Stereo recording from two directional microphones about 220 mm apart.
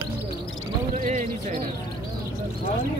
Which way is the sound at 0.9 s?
35° right (ahead or behind).